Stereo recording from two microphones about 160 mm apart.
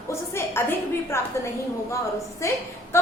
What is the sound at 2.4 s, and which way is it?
Speech, 20° left (ahead or behind).